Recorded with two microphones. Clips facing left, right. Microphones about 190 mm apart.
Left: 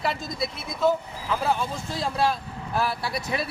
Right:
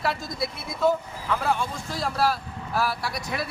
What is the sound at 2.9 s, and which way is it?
Speech, 25° left (ahead or behind).